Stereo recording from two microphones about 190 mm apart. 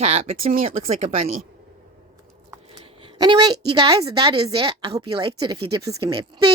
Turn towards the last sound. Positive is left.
turn(degrees=-20)  # may be behind; listen again after turning